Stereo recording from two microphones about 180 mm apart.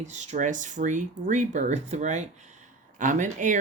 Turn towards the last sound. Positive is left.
turn(degrees=-45)  # may be behind; listen again after turning